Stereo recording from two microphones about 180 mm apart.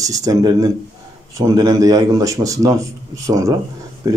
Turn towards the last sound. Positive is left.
turn(degrees=-20)  # may be behind; listen again after turning